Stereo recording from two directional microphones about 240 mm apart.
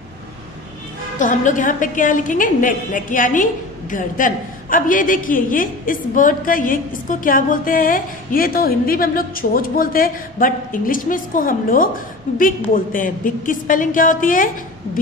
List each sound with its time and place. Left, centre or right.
1.1 s a woman's voice: left